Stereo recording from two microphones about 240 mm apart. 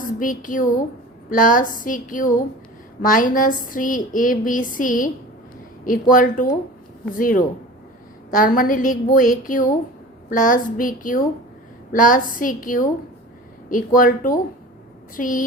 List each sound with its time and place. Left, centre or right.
0.2 s a woman's voice: left